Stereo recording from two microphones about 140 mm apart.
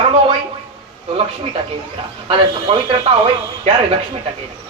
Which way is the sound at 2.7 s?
50° right (ahead or behind).